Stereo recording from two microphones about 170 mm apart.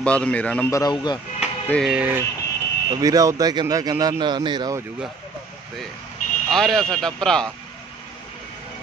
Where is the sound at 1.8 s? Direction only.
10° right (ahead or behind).